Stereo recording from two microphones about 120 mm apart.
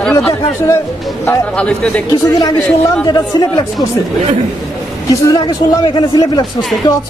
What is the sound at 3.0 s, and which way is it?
Speech, 35° left (ahead or behind).